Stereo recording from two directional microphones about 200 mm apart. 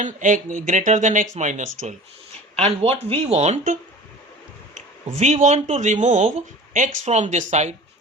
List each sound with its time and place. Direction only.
0.0 s speech: 40° right (ahead or behind)